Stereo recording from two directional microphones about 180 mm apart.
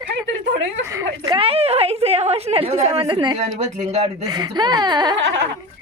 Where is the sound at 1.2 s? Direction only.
30° right (ahead or behind).